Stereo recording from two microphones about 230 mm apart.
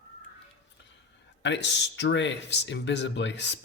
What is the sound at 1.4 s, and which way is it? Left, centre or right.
Speech, left.